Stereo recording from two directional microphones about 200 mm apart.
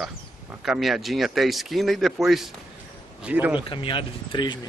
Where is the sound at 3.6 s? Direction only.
25° left (ahead or behind).